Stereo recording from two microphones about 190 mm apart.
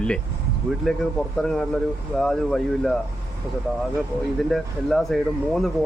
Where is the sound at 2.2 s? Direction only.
5° left (ahead or behind).